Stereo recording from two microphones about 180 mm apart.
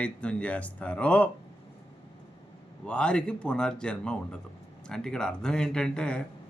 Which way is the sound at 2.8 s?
5° left (ahead or behind).